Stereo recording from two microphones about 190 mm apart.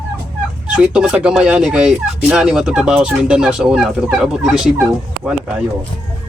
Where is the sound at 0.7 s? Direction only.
5° right (ahead or behind).